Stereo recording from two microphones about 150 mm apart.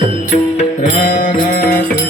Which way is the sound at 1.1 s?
65° left (ahead or behind).